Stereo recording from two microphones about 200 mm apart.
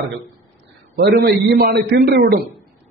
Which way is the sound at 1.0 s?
50° right (ahead or behind).